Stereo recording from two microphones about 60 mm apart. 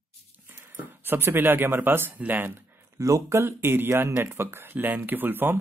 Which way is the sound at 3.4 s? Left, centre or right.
Right.